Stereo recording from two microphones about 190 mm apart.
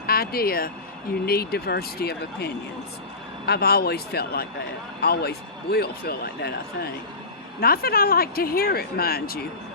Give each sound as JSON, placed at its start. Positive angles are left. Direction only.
{"t": 0.0, "sound": "speech", "side_deg": 55}